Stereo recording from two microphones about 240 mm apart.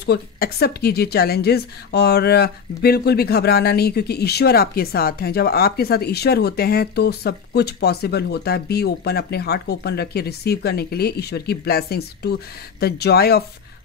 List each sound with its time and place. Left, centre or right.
0.0 s a woman's voice: left